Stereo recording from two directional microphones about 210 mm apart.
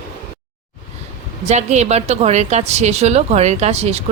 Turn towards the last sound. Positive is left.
turn(degrees=-30)  # may be behind; listen again after turning